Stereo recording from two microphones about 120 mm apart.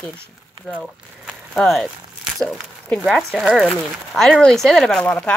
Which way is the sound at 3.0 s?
Centre (ahead or behind).